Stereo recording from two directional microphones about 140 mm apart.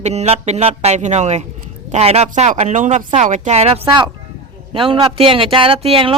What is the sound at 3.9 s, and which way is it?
Speech, 35° right (ahead or behind).